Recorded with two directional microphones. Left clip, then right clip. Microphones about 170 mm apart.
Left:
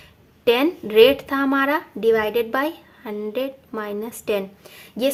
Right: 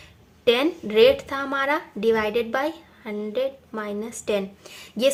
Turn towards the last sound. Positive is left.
turn(degrees=15)  # may be behind; listen again after turning